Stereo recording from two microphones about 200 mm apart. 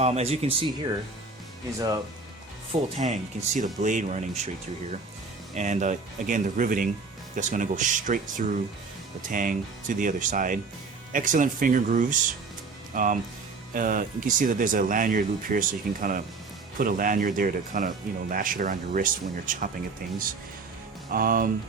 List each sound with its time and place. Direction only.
0.0 s speech: 30° right (ahead or behind)
3.0 s speech: 35° right (ahead or behind)
5.5 s speech: 35° right (ahead or behind)